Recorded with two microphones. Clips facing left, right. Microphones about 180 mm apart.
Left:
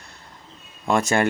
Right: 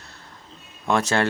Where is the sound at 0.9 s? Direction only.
10° left (ahead or behind).